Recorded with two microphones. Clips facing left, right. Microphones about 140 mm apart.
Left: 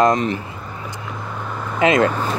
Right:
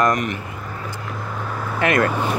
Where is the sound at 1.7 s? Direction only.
20° left (ahead or behind).